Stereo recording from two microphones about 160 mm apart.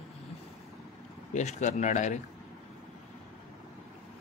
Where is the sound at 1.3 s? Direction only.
50° left (ahead or behind).